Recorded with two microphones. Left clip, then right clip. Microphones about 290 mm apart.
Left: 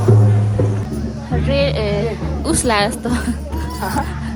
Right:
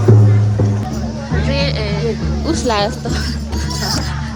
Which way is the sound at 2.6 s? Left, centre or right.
Left.